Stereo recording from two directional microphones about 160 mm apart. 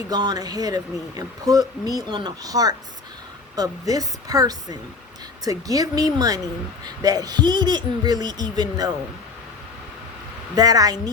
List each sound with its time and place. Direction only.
0.1 s speech: 25° right (ahead or behind)
10.5 s speech: 25° right (ahead or behind)